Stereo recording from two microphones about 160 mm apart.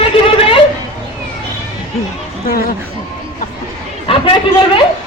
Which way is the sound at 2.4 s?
65° left (ahead or behind).